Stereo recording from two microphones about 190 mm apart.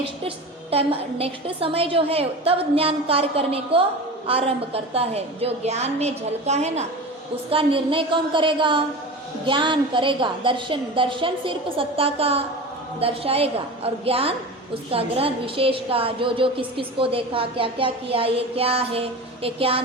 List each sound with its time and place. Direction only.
0.3 s a woman's voice: 30° right (ahead or behind)